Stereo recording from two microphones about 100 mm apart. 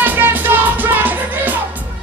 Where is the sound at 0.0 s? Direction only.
20° right (ahead or behind).